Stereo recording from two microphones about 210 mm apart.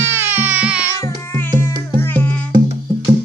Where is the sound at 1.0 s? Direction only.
10° left (ahead or behind).